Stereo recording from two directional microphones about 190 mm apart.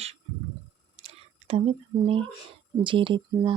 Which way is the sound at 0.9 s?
30° right (ahead or behind).